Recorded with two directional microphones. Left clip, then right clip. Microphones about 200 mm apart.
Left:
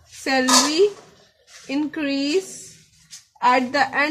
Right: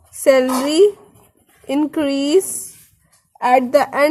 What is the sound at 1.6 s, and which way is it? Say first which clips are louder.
Speech: right 6 dB; 45° right (ahead or behind).